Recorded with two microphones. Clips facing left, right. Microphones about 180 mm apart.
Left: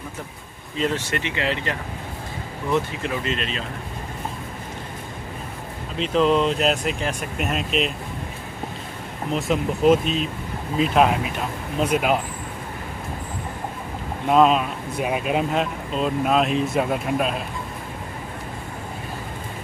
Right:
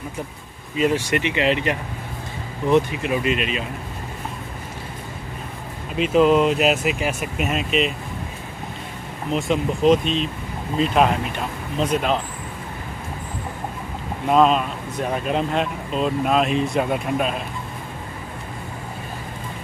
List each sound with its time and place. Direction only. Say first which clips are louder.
0.7 s speech: right 4 dB; 10° right (ahead or behind)
5.9 s speech: right 3 dB; 10° right (ahead or behind)
9.3 s speech: right 1 dB; centre (ahead or behind)
14.3 s speech: even; centre (ahead or behind)